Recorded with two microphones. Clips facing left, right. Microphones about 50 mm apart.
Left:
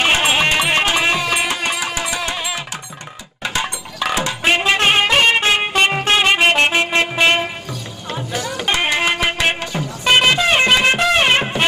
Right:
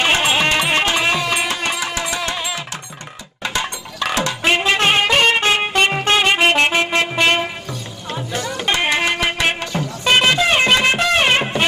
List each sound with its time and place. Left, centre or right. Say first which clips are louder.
0.0 s music: left 1 dB; centre
3.4 s a sound: left 1 dB; centre
4.2 s music: even; centre
8.9 s music: left 1 dB; centre
9.8 s music: left 1 dB; centre